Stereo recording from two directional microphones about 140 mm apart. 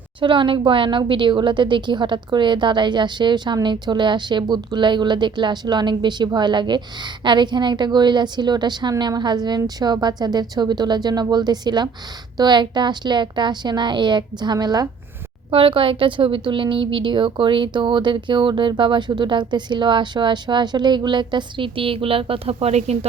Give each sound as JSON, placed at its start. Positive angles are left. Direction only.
{"t": 0.2, "sound": "a woman's voice", "side_deg": -35}
{"t": 15.4, "sound": "a woman's voice", "side_deg": -40}